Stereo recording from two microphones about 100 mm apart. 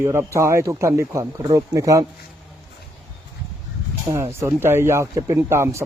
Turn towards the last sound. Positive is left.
turn(degrees=-25)  # may be behind; listen again after turning